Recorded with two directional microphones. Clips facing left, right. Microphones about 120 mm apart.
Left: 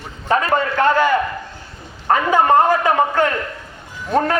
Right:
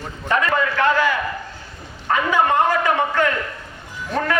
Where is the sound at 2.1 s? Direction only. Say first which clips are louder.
Left 4 dB; 40° left (ahead or behind).